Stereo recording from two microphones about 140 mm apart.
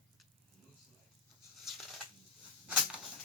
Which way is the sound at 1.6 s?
Centre (ahead or behind).